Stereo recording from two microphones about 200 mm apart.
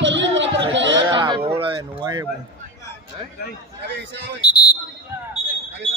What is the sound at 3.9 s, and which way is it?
Speech, 55° right (ahead or behind).